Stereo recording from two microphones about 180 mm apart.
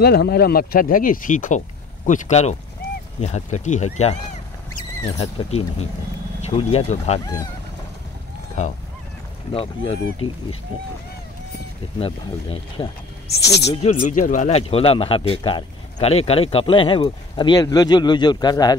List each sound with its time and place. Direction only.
0.0 s speech: 65° left (ahead or behind); by 7.2 s 35° left (ahead or behind)
9.5 s speech: 30° left (ahead or behind)
12.0 s speech: 30° left (ahead or behind)
13.3 s speech: 70° left (ahead or behind)
13.7 s speech: 40° left (ahead or behind); by 18.8 s 20° left (ahead or behind)